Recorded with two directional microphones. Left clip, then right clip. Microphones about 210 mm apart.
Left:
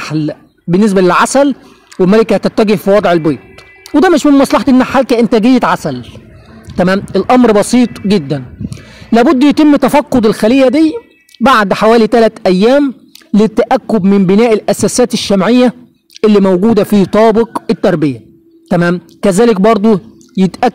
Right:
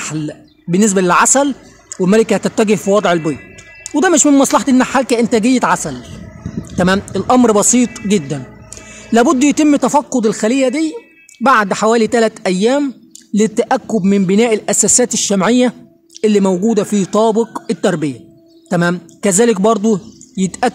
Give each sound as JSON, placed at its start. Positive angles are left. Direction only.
{"t": 0.0, "sound": "a man's voice", "side_deg": 20}